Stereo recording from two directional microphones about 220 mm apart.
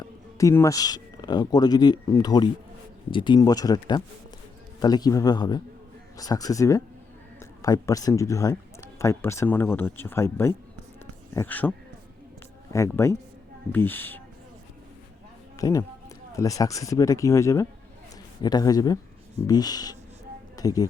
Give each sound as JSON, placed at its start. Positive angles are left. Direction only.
{"t": 0.0, "sound": "a man's voice", "side_deg": 15}
{"t": 12.7, "sound": "a man's voice", "side_deg": 15}
{"t": 15.5, "sound": "a man's voice", "side_deg": 15}